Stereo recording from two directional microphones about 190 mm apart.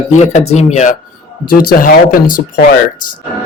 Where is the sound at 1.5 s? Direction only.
50° left (ahead or behind).